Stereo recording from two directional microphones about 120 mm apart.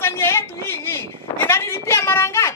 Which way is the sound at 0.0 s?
20° left (ahead or behind).